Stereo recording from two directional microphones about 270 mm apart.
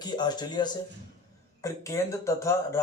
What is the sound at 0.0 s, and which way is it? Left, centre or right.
Speech, centre.